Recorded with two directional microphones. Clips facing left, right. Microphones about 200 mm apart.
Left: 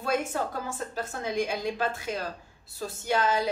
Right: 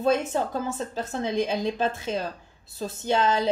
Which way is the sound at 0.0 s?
25° right (ahead or behind).